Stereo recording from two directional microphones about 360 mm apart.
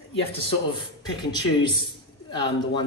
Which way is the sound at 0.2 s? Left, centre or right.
Centre.